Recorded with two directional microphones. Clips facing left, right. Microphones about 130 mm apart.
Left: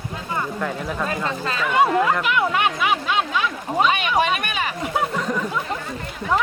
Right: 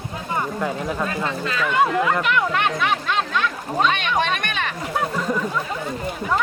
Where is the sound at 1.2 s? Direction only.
35° left (ahead or behind).